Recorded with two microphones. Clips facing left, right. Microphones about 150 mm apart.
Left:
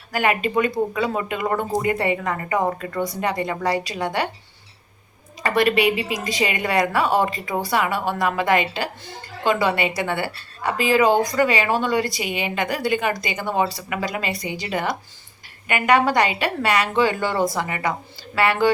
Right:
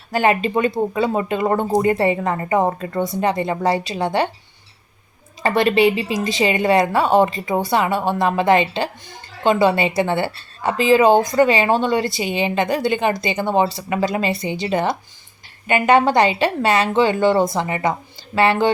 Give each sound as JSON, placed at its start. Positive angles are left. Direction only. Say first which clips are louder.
{"t": 0.1, "sound": "speech", "louder": "right 4 dB", "side_deg": -30}
{"t": 5.4, "sound": "speech", "louder": "right 3 dB", "side_deg": -25}